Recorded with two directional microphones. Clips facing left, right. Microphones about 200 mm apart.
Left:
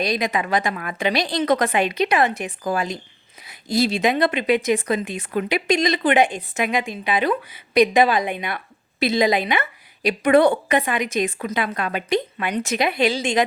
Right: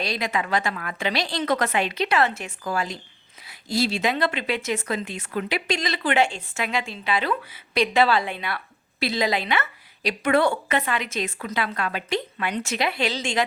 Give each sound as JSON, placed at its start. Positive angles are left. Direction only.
{"t": 0.0, "sound": "speech", "side_deg": 15}